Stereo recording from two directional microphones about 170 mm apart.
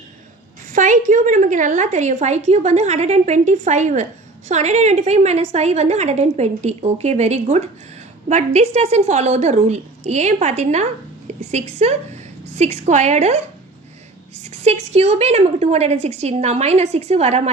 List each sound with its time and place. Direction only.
0.7 s a woman's voice: 50° right (ahead or behind)
14.5 s a woman's voice: 40° right (ahead or behind)